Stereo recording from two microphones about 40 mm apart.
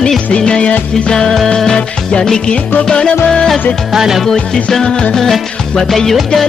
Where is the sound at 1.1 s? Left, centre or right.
Centre.